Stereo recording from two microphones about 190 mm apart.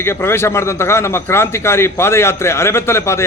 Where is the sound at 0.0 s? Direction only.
15° left (ahead or behind).